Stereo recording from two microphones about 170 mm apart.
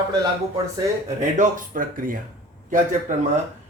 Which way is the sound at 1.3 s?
50° right (ahead or behind).